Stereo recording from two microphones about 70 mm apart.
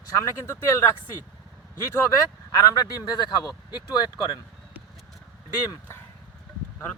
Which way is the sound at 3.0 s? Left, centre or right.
Left.